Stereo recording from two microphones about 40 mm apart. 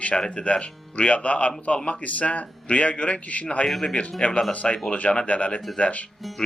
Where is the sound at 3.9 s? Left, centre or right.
Left.